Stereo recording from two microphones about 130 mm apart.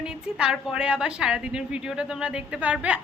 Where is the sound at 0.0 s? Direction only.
5° right (ahead or behind).